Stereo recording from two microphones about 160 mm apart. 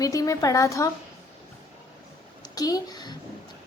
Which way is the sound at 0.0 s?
20° left (ahead or behind).